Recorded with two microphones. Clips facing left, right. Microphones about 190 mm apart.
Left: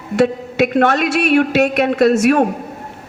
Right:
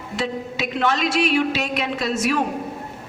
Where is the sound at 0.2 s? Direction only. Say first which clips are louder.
Left 11 dB; 60° left (ahead or behind).